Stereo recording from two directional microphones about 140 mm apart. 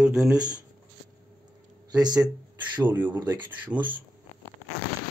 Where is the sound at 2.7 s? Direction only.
10° right (ahead or behind).